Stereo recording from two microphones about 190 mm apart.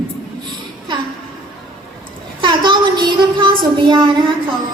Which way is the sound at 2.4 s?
25° right (ahead or behind).